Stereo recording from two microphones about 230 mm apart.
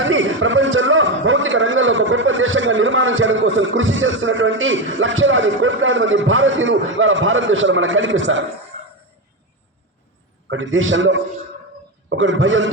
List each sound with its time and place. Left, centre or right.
0.0 s a man's voice: right
10.5 s a man's voice: right